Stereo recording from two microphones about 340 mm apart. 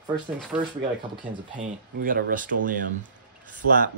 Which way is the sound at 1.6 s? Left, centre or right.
Right.